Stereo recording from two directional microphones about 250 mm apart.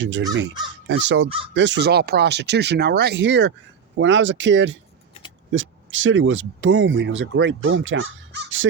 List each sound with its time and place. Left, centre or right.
0.0 s speech: right